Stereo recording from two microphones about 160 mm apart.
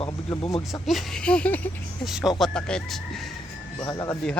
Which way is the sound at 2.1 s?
Centre (ahead or behind).